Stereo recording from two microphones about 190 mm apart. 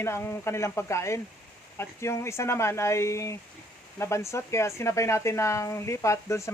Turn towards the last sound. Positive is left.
turn(degrees=15)  # may be behind; listen again after turning